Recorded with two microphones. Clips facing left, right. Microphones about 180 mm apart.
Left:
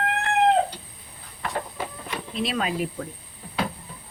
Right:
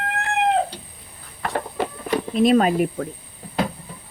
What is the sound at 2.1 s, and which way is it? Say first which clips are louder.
Speech: right 12 dB; 45° right (ahead or behind).